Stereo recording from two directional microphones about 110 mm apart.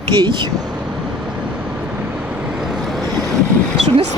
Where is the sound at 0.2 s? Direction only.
45° right (ahead or behind).